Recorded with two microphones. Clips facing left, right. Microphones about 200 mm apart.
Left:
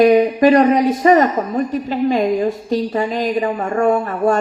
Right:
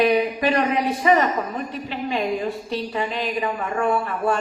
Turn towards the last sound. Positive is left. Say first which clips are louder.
# left 6 dB
turn(degrees=45)  # may be behind; listen again after turning